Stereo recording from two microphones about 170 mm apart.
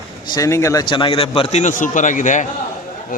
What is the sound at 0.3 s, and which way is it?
A man's voice, 20° left (ahead or behind).